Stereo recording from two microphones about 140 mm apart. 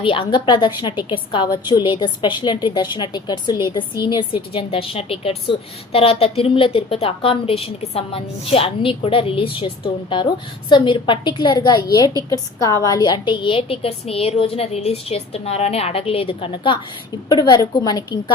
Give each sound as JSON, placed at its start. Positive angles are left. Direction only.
{"t": 0.0, "sound": "a woman's voice", "side_deg": 40}